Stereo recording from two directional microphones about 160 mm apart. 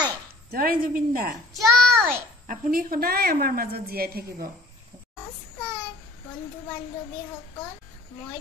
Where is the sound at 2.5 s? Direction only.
60° right (ahead or behind).